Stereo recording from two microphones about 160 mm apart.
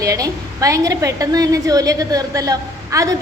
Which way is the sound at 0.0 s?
20° right (ahead or behind).